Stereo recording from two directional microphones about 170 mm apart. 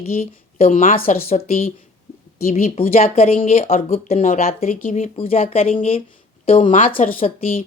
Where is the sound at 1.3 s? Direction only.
40° left (ahead or behind).